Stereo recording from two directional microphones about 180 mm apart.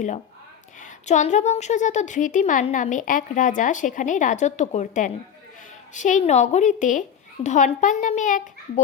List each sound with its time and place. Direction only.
0.8 s a woman's voice: 40° left (ahead or behind)